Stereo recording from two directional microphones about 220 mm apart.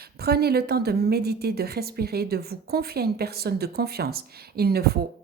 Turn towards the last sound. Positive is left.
turn(degrees=-45)  # may be behind; listen again after turning